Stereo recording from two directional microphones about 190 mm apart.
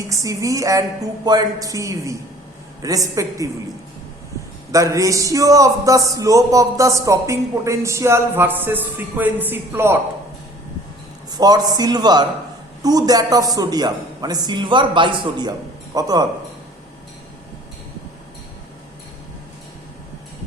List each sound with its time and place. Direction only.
0.1 s a man's voice: 15° right (ahead or behind)
4.7 s a man's voice: 15° right (ahead or behind)
11.3 s a man's voice: 20° right (ahead or behind)